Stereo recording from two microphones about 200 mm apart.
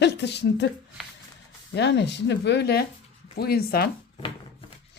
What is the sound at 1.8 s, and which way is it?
Speech, 60° left (ahead or behind).